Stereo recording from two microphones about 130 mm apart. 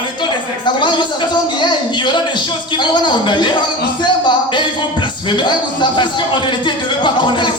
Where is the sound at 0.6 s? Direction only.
35° left (ahead or behind).